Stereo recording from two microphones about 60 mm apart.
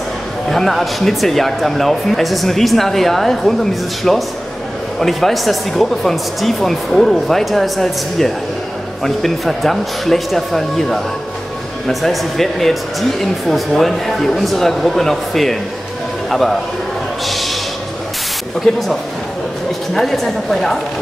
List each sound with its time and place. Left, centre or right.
0.5 s a man's voice: centre
17.3 s a sound: centre
18.6 s speech: centre
19.9 s speech: centre